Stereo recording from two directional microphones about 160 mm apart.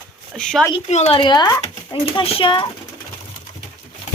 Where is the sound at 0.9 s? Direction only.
40° left (ahead or behind).